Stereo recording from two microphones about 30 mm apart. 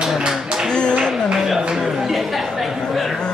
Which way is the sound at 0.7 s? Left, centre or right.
Left.